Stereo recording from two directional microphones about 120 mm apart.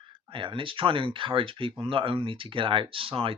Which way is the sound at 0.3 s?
45° right (ahead or behind).